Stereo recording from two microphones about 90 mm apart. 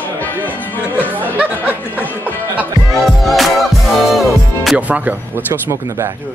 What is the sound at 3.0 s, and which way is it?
Music, centre (ahead or behind).